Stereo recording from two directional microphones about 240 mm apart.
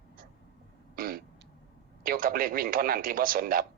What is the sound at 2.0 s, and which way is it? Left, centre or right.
A man's voice, right.